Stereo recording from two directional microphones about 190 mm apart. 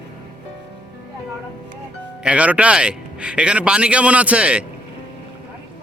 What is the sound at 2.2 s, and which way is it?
Speech, 5° right (ahead or behind).